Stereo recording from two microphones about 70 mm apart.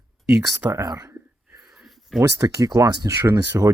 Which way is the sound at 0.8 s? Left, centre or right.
Right.